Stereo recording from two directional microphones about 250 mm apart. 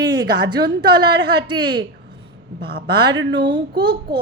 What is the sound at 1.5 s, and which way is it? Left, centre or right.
Speech, centre.